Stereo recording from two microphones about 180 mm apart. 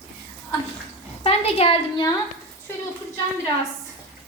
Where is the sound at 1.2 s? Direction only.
35° left (ahead or behind).